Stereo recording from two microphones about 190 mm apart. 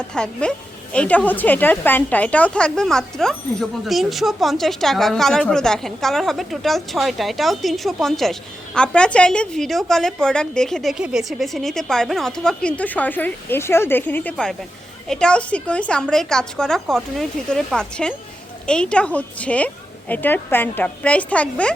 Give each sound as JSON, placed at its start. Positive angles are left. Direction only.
{"t": 0.1, "sound": "a woman's voice", "side_deg": 5}